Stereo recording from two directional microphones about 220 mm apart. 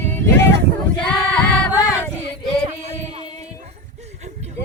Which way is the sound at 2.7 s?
30° right (ahead or behind).